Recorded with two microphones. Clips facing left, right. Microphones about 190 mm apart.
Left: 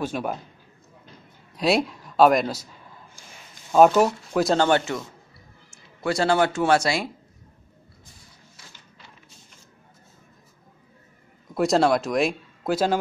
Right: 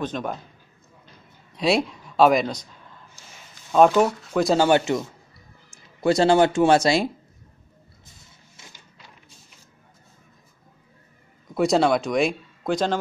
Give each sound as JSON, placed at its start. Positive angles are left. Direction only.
{"t": 0.0, "sound": "a man's voice", "side_deg": 10}
{"t": 1.5, "sound": "speech", "side_deg": 0}
{"t": 4.6, "sound": "a man's voice", "side_deg": -15}
{"t": 6.0, "sound": "speech", "side_deg": -20}
{"t": 11.5, "sound": "speech", "side_deg": 0}